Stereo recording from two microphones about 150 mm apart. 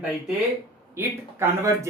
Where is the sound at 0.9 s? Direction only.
15° right (ahead or behind).